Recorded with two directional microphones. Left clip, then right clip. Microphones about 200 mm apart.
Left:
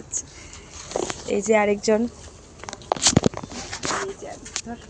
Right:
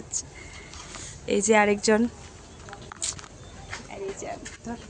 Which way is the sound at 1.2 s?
5° right (ahead or behind).